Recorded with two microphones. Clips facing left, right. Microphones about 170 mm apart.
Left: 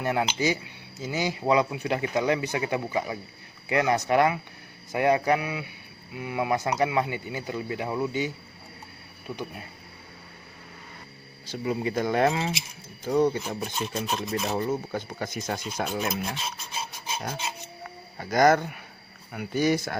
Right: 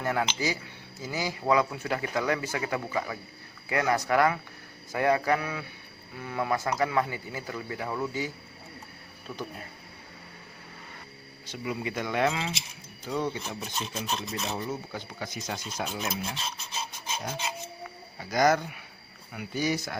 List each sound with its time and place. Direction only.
0.0 s speech: 20° left (ahead or behind)
11.5 s speech: 35° left (ahead or behind)
13.6 s filing: 55° left (ahead or behind)
18.2 s filing: 50° left (ahead or behind)